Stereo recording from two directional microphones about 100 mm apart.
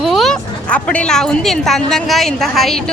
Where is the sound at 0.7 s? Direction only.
10° left (ahead or behind).